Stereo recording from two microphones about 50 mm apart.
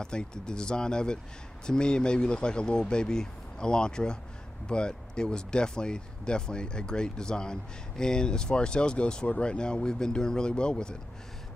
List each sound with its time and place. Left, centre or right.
0.0 s speech: centre